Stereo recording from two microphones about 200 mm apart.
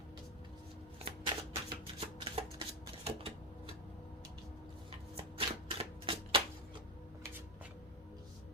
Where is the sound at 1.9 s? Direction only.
25° right (ahead or behind).